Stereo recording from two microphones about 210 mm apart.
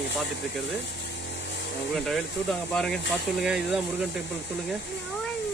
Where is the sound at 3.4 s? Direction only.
Centre (ahead or behind).